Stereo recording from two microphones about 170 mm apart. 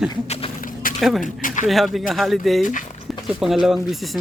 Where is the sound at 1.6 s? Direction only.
Centre (ahead or behind).